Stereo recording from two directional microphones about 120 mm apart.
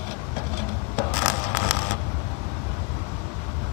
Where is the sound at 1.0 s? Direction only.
25° left (ahead or behind).